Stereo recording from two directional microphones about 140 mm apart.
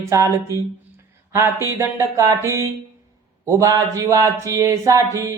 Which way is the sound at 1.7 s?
20° right (ahead or behind).